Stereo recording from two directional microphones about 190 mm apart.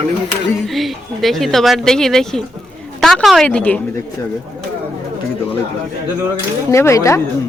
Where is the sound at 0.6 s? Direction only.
Centre (ahead or behind).